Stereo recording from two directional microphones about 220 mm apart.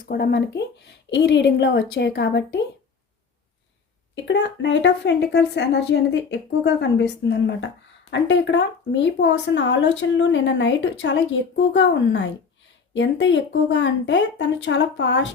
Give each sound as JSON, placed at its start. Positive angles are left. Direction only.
{"t": 0.0, "sound": "a woman's voice", "side_deg": 45}
{"t": 4.1, "sound": "a woman's voice", "side_deg": 55}